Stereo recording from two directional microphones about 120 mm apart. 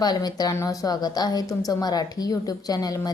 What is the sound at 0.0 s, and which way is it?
A woman's voice, 35° left (ahead or behind).